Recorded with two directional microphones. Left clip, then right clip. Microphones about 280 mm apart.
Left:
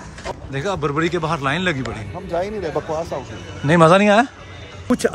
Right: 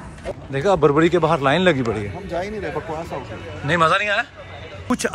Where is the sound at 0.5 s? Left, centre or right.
Centre.